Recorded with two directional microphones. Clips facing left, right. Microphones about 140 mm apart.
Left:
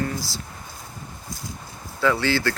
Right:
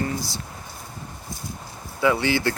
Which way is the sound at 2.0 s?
20° right (ahead or behind).